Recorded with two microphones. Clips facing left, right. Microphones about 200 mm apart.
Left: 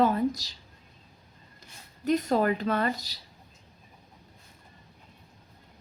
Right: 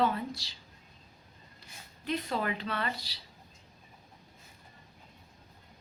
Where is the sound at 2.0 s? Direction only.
45° left (ahead or behind).